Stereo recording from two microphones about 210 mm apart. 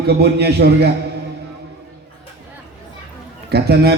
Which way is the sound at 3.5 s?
50° right (ahead or behind).